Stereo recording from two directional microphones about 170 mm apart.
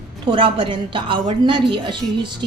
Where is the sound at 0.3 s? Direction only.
30° right (ahead or behind).